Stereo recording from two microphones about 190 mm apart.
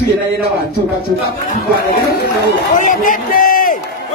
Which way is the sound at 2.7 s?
45° left (ahead or behind).